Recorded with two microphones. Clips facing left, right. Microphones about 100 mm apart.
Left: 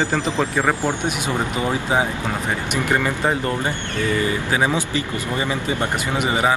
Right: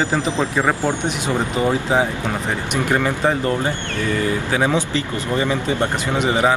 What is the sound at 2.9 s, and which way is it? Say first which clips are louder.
Speech: right 2 dB; centre (ahead or behind).